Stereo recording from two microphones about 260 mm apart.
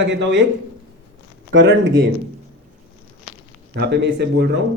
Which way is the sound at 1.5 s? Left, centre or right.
Right.